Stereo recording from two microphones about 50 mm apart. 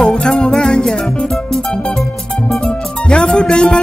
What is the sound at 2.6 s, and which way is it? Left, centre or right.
Music, centre.